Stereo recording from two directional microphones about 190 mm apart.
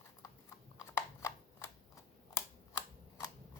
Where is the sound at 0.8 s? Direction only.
15° left (ahead or behind).